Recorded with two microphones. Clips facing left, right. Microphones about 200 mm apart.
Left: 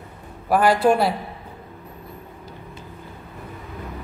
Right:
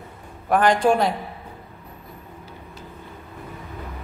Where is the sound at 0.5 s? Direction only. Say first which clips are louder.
Left 1 dB; 5° left (ahead or behind).